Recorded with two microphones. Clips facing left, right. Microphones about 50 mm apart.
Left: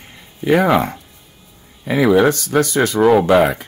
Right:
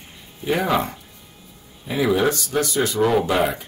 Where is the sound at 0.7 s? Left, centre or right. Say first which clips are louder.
Left 6 dB; left.